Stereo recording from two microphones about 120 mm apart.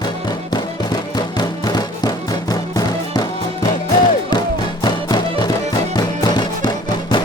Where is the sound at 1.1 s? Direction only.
35° left (ahead or behind).